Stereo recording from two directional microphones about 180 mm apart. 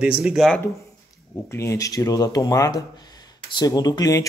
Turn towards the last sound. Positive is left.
turn(degrees=20)  # may be behind; listen again after turning